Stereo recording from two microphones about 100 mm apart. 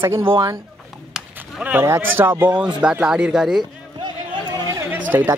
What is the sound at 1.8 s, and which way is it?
Speech, 25° right (ahead or behind).